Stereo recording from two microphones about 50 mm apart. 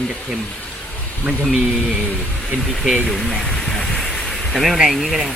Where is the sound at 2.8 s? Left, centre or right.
Centre.